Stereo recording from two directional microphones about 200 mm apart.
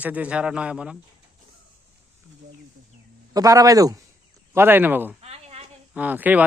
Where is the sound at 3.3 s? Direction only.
15° right (ahead or behind).